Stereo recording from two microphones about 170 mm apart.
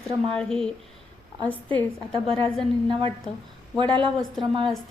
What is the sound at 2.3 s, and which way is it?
Speech, 30° right (ahead or behind).